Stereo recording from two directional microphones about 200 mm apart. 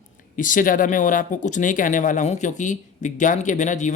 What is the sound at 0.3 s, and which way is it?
Speech, 40° left (ahead or behind).